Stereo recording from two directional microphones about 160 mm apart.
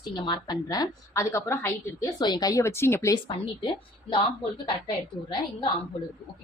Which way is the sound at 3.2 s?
35° left (ahead or behind).